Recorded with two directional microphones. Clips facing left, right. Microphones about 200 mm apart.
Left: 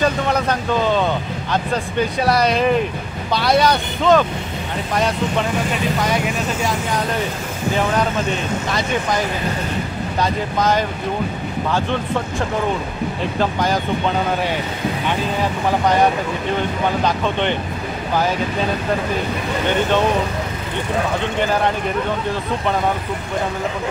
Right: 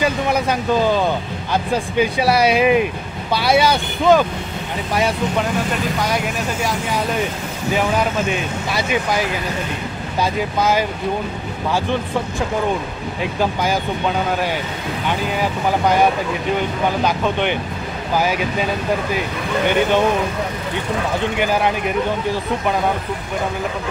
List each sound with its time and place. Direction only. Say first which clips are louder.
0.0 s speech: even; 10° right (ahead or behind)
8.3 s speech: left 1 dB; 10° right (ahead or behind)
10.2 s speech: right 1 dB; 5° right (ahead or behind)
13.4 s speech: even; 5° right (ahead or behind)
21.4 s speech: left 1 dB; 10° right (ahead or behind)